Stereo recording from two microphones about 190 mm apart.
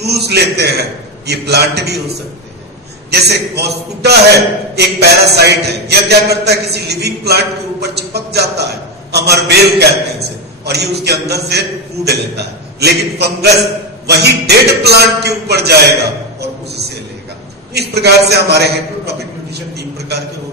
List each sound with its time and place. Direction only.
0.0 s a man's voice: 60° right (ahead or behind)